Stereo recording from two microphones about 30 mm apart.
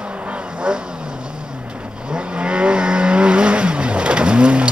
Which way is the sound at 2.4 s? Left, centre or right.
Right.